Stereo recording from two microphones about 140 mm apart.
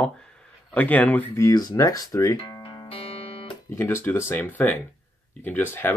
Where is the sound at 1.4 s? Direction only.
25° left (ahead or behind).